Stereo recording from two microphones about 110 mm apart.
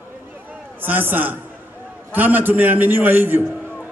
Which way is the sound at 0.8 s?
15° right (ahead or behind).